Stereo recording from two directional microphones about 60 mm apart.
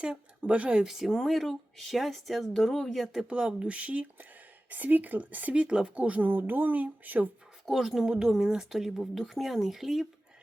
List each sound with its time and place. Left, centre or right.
0.0 s speech: centre
3.2 s speech: centre
5.6 s speech: centre; by 7.3 s right
7.6 s speech: centre